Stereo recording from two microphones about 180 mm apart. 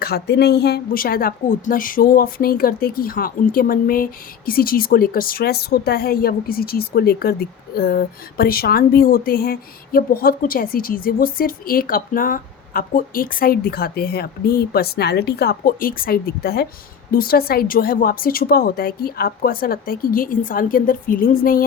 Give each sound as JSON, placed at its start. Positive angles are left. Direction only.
{"t": 0.0, "sound": "a woman's voice", "side_deg": 65}